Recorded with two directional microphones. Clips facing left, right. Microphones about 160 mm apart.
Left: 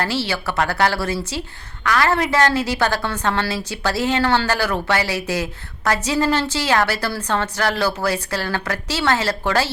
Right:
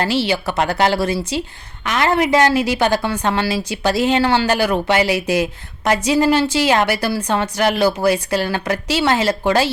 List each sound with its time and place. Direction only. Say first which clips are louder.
0.0 s a woman's voice: right 4 dB; 15° right (ahead or behind)